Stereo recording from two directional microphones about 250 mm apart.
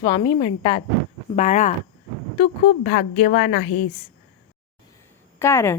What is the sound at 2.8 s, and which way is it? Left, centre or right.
A woman's voice, left.